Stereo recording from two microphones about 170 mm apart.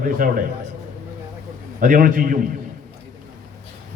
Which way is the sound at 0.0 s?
55° right (ahead or behind).